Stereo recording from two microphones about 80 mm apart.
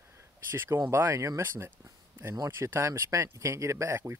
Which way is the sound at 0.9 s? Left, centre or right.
Right.